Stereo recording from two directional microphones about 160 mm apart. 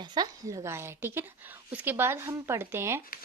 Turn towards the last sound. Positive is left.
turn(degrees=-15)  # may be behind; listen again after turning